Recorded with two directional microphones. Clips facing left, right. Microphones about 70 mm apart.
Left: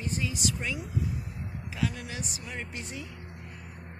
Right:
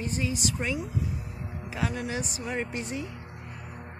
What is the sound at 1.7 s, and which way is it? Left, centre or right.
Speech, right.